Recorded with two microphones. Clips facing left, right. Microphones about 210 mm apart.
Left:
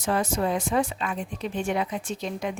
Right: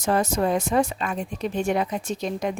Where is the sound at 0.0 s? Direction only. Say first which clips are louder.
Right 3 dB; 40° right (ahead or behind).